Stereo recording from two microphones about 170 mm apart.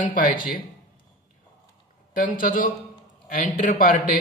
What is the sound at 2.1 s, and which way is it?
A man's voice, 55° left (ahead or behind).